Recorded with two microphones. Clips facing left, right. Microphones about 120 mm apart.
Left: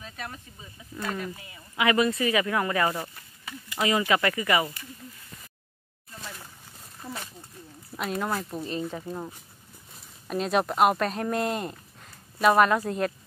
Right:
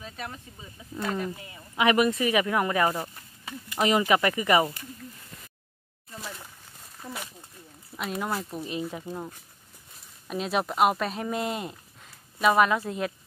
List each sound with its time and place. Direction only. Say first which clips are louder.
0.0 s speech: right 1 dB; 15° right (ahead or behind)
7.0 s speech: even; 5° left (ahead or behind)